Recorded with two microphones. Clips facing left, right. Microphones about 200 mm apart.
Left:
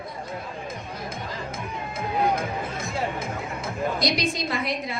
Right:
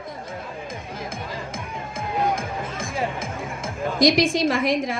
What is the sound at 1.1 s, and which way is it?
Music, 90° right.